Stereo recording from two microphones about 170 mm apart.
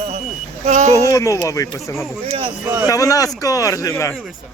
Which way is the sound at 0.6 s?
40° right (ahead or behind).